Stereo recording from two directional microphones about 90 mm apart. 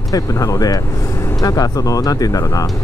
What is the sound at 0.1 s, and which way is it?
Speech, 40° left (ahead or behind).